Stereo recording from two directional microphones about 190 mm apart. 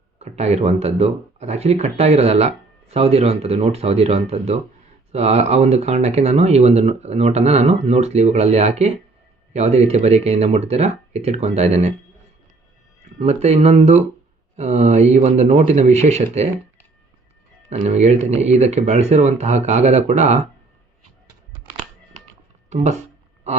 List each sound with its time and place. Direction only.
0.2 s speech: 35° right (ahead or behind)
13.1 s speech: 35° right (ahead or behind)
17.8 s speech: 35° right (ahead or behind)